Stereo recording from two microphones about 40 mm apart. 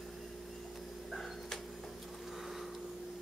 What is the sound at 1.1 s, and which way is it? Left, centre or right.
Tick-tock, centre.